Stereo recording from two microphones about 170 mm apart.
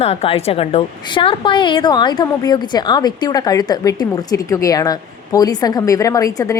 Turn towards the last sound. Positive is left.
turn(degrees=20)  # may be behind; listen again after turning